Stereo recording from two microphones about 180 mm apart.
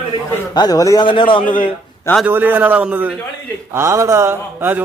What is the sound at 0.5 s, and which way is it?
Speech, 20° left (ahead or behind).